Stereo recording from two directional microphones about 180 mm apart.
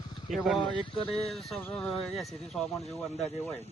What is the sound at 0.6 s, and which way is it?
Speech, 30° left (ahead or behind).